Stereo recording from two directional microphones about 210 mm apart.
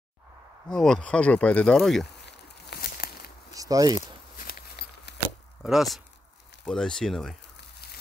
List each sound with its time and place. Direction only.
0.7 s speech: 5° left (ahead or behind)
2.1 s a sound: 55° left (ahead or behind)
3.5 s speech: 15° right (ahead or behind)
4.5 s horse: 45° left (ahead or behind)
5.6 s speech: centre (ahead or behind)